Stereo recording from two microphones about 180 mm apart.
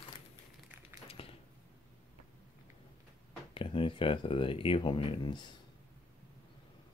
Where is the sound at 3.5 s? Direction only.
30° left (ahead or behind).